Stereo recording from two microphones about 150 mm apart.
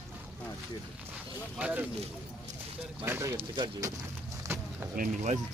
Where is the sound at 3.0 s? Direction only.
15° right (ahead or behind).